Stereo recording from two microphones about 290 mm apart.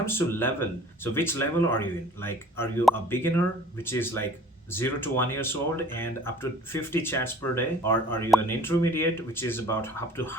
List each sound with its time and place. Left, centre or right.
0.0 s speech: centre